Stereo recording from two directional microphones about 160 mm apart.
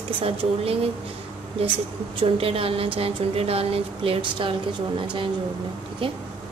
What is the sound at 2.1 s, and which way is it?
A woman's voice, 35° right (ahead or behind).